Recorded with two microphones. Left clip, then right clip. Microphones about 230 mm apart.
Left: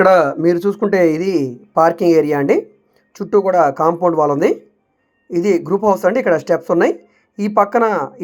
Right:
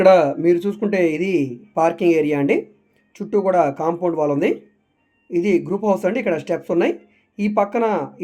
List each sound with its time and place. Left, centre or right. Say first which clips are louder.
0.1 s speech: left 2 dB; centre